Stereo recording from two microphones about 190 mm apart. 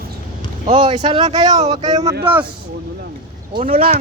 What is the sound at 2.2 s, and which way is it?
Speech, 10° right (ahead or behind).